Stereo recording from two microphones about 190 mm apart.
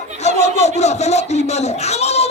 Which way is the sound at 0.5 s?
35° left (ahead or behind).